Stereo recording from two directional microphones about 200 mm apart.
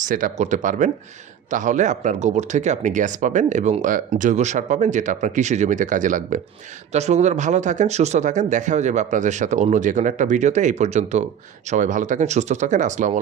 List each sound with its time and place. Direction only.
0.0 s speech: 40° right (ahead or behind)